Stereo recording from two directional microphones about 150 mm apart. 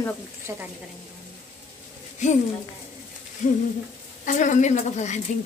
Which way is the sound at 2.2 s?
50° left (ahead or behind).